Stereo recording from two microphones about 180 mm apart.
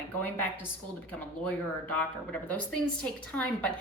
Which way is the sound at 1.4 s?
5° left (ahead or behind).